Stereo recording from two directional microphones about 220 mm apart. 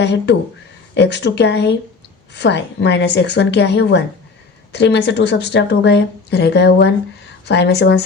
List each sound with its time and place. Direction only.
0.0 s a woman's voice: 50° left (ahead or behind)